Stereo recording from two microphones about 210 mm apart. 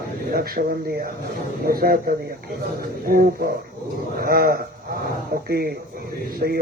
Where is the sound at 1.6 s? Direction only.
45° right (ahead or behind).